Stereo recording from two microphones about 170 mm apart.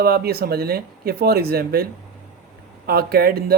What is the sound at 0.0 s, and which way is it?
Speech, 65° right (ahead or behind).